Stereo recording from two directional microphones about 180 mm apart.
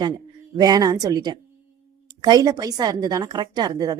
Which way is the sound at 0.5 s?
20° right (ahead or behind).